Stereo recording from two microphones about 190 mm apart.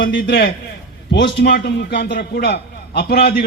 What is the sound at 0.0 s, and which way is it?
Speech, 50° left (ahead or behind).